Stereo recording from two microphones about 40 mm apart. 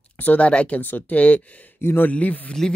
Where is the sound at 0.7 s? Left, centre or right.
Left.